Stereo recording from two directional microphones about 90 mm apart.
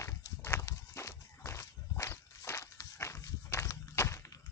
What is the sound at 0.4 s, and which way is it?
Walk, 30° left (ahead or behind).